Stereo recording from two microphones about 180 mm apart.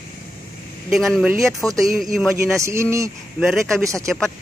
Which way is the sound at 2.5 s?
15° right (ahead or behind).